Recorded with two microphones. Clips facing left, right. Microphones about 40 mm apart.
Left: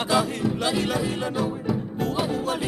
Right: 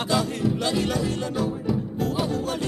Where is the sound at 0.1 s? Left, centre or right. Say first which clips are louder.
Left 1 dB; centre.